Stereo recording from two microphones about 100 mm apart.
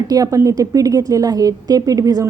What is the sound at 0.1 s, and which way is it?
A woman's voice, 35° right (ahead or behind).